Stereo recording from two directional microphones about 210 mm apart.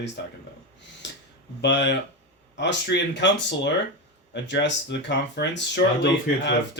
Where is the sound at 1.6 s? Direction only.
55° left (ahead or behind).